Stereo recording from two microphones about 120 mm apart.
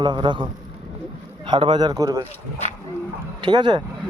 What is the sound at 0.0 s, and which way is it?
Speech, 40° right (ahead or behind).